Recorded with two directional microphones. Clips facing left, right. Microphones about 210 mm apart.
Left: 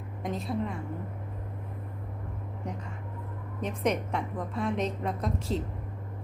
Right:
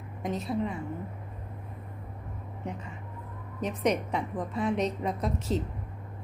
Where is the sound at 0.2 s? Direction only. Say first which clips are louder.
Right 1 dB; centre (ahead or behind).